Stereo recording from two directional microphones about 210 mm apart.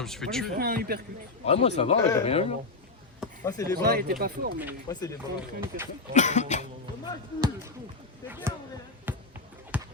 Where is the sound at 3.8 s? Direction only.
45° right (ahead or behind).